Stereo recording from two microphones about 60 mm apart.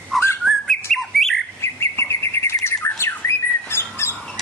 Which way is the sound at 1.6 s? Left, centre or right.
Left.